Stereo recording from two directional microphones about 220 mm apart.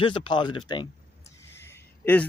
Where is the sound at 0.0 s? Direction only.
20° left (ahead or behind).